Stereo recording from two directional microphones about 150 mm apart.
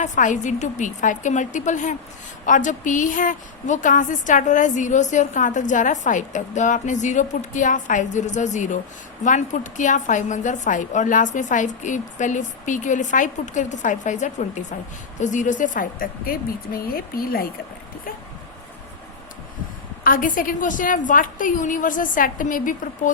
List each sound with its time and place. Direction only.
0.0 s a woman's voice: 55° left (ahead or behind); by 17.4 s 75° left (ahead or behind)
20.1 s a woman's voice: 65° left (ahead or behind)